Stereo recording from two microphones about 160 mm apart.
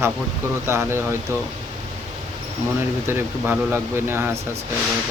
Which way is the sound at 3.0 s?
15° right (ahead or behind).